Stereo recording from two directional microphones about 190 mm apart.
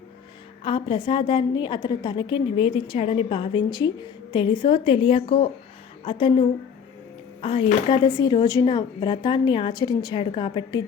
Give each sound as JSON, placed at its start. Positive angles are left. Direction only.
{"t": 0.6, "sound": "a woman's voice", "side_deg": 25}
{"t": 7.4, "sound": "a woman's voice", "side_deg": 25}